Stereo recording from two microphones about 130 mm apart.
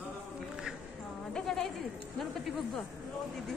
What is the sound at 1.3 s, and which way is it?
Sheep, 5° left (ahead or behind).